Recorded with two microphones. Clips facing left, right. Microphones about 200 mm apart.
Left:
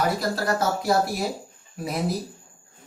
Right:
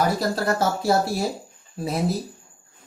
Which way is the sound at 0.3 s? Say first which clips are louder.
Right 2 dB; 30° right (ahead or behind).